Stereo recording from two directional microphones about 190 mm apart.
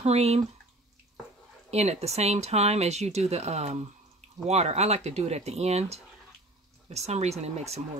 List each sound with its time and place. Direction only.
0.0 s speech: 35° right (ahead or behind)
1.7 s speech: 35° right (ahead or behind)